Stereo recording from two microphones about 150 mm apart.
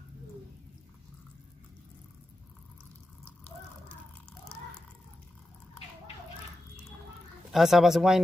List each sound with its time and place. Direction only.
7.5 s speech: centre (ahead or behind)